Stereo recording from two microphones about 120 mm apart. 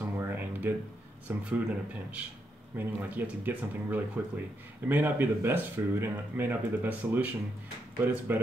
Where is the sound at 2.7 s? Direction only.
15° right (ahead or behind).